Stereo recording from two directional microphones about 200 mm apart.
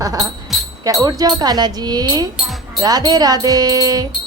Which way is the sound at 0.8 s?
15° right (ahead or behind).